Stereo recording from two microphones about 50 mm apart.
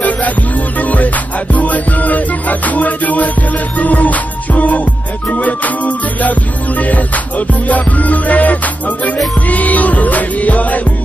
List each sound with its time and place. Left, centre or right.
0.7 s music: left